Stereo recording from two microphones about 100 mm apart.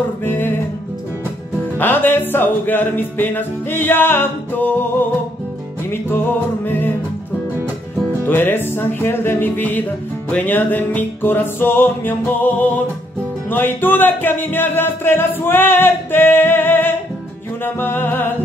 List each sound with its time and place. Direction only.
0.2 s music: 20° left (ahead or behind)
1.8 s music: 20° left (ahead or behind)
6.0 s music: 20° left (ahead or behind)
8.3 s music: 20° left (ahead or behind)